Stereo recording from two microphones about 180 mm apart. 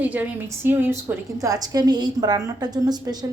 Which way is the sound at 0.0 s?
10° right (ahead or behind).